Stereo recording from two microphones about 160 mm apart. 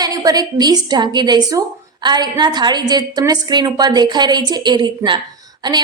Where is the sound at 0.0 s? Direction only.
25° right (ahead or behind).